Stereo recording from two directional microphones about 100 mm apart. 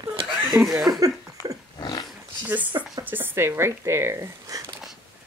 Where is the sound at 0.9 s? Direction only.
35° right (ahead or behind).